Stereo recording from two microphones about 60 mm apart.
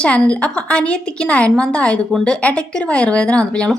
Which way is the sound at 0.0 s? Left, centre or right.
Centre.